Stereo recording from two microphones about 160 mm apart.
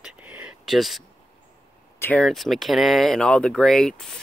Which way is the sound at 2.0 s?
5° left (ahead or behind).